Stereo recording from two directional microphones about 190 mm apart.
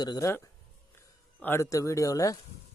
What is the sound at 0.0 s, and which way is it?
Speech, 20° left (ahead or behind).